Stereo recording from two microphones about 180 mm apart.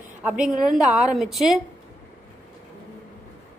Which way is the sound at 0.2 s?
5° right (ahead or behind).